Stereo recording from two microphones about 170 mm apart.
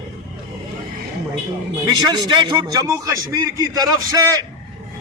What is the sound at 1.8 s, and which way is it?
A man's voice, 25° right (ahead or behind).